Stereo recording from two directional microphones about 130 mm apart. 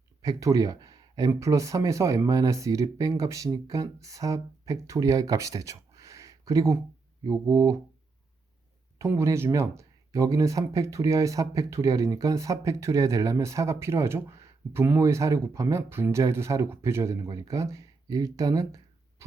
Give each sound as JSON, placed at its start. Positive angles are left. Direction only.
{"t": 0.2, "sound": "speech", "side_deg": -25}
{"t": 9.0, "sound": "speech", "side_deg": -20}